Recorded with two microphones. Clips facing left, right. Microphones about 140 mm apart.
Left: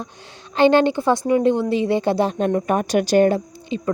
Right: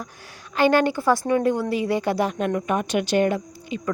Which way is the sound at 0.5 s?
25° left (ahead or behind).